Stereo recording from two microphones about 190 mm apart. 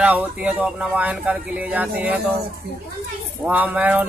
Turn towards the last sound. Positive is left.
turn(degrees=-10)  # may be behind; listen again after turning